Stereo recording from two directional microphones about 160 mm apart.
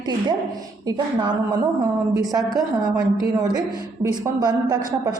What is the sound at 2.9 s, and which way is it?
A woman's voice, 20° right (ahead or behind).